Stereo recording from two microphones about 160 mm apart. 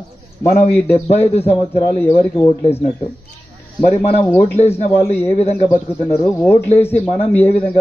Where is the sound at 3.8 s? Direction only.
40° left (ahead or behind).